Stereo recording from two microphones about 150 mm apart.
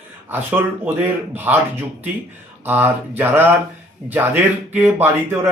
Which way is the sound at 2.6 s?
15° right (ahead or behind).